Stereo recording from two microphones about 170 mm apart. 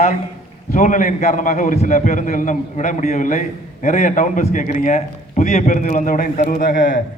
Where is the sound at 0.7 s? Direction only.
50° left (ahead or behind).